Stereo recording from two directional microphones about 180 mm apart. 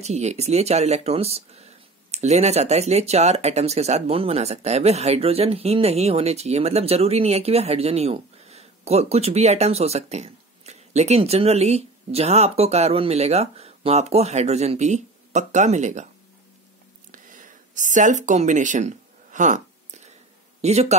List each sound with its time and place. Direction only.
0.0 s speech: 35° right (ahead or behind)
17.1 s a sound: 45° right (ahead or behind)
20.6 s speech: 40° right (ahead or behind)